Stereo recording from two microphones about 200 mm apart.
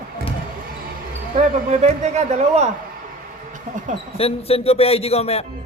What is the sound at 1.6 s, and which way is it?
A man's voice, 35° right (ahead or behind).